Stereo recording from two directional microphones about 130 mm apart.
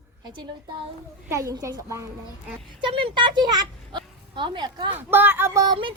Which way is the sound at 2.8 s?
40° right (ahead or behind).